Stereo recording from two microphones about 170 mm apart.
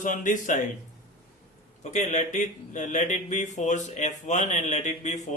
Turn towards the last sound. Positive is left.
turn(degrees=45)  # may be behind; listen again after turning